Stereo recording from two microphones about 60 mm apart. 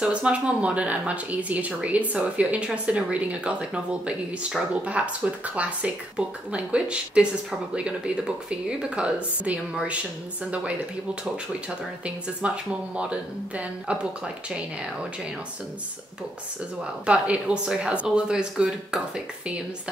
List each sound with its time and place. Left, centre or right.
0.0 s speech: centre
8.5 s speech: centre
12.4 s speech: centre
17.0 s speech: centre